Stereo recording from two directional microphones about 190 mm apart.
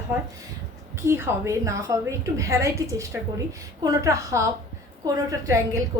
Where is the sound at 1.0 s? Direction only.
10° right (ahead or behind).